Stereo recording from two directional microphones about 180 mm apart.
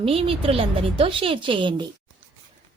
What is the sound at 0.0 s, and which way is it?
A woman's voice, 30° right (ahead or behind).